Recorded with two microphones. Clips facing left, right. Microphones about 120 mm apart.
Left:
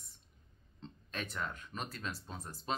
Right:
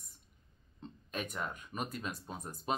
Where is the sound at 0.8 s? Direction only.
10° right (ahead or behind).